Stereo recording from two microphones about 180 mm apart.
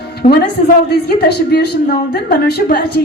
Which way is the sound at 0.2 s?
40° left (ahead or behind).